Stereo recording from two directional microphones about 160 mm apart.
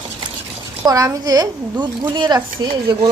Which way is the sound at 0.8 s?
20° right (ahead or behind).